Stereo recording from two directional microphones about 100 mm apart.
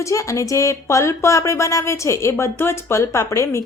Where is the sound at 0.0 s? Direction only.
30° left (ahead or behind).